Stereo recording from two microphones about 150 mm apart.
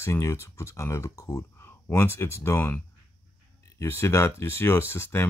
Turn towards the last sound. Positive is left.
turn(degrees=15)  # may be behind; listen again after turning